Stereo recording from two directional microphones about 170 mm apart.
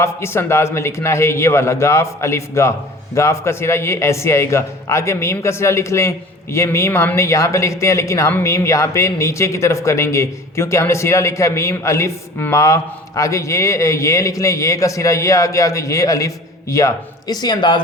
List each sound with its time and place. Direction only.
0.0 s a man's voice: 15° left (ahead or behind)